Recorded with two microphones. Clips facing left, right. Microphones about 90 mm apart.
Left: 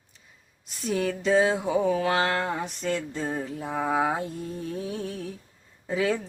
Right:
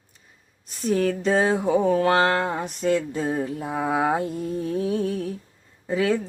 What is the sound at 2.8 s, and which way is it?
Speech, 10° right (ahead or behind).